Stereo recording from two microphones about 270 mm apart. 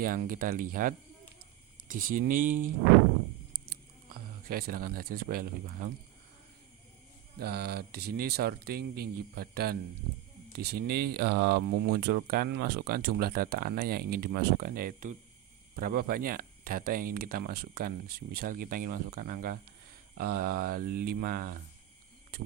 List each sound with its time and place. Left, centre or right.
0.0 s speech: right
2.3 s speech: right
4.4 s speech: right
7.3 s speech: right